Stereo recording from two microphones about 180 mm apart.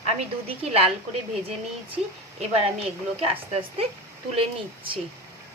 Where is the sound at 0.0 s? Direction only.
35° right (ahead or behind).